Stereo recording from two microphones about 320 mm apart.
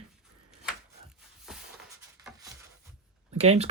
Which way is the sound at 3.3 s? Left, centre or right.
Centre.